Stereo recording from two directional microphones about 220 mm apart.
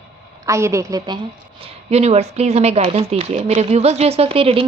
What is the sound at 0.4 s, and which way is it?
A woman's voice, 15° right (ahead or behind).